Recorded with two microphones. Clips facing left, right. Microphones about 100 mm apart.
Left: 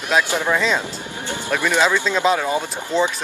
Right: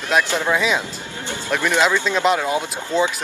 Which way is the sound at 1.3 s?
10° left (ahead or behind).